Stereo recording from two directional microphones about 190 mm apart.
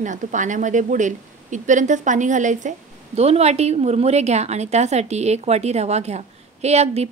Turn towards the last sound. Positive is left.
turn(degrees=-35)  # may be behind; listen again after turning